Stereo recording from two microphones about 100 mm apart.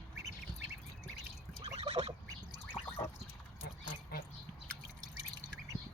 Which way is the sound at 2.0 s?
90° right.